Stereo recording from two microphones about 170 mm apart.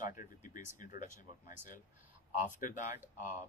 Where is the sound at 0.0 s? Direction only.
50° left (ahead or behind).